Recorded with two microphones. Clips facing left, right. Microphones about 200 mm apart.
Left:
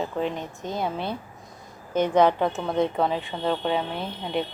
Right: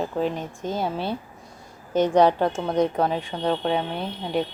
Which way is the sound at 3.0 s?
Centre (ahead or behind).